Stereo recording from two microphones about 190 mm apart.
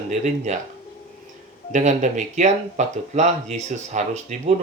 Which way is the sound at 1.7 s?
40° right (ahead or behind).